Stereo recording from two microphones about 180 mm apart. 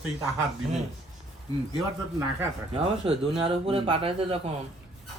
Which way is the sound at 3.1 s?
30° right (ahead or behind).